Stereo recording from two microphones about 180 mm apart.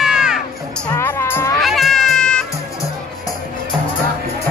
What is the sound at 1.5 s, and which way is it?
Baby cry, centre (ahead or behind).